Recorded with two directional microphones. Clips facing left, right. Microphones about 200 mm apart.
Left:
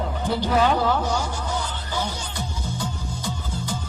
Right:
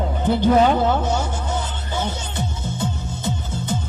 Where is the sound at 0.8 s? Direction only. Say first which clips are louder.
Right 3 dB; 25° right (ahead or behind).